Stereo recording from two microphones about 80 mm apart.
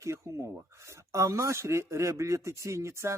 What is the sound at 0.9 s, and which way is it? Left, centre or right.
Speech, right.